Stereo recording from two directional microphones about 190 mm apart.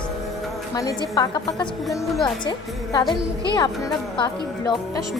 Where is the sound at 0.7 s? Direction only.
15° left (ahead or behind).